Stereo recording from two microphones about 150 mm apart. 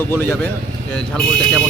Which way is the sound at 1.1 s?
5° left (ahead or behind).